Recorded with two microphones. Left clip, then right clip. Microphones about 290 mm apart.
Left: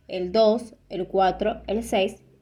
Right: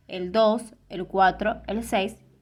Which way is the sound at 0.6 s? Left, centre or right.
Centre.